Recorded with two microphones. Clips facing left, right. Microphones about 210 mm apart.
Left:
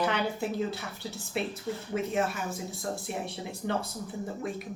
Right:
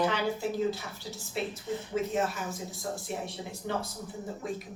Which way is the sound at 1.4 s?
60° left (ahead or behind).